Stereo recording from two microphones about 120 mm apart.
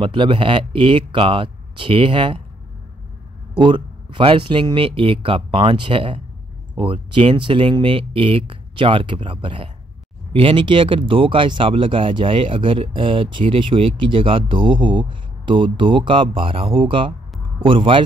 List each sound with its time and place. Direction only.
0.0 s speech: 45° right (ahead or behind)
3.5 s speech: 45° right (ahead or behind)
7.3 s speech: 45° right (ahead or behind)